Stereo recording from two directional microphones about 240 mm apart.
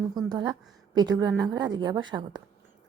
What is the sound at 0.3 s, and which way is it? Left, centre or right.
A woman's voice, centre.